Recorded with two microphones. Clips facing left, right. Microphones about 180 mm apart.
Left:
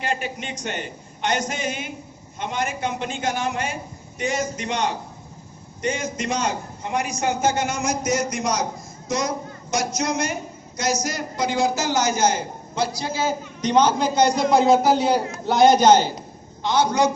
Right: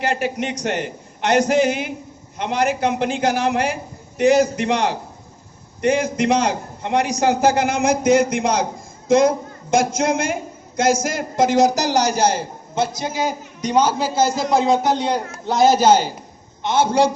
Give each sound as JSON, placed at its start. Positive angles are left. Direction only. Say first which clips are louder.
{"t": 0.0, "sound": "a man's voice", "louder": "right 6 dB", "side_deg": -70}
{"t": 16.6, "sound": "a man's voice", "louder": "right 3 dB", "side_deg": -25}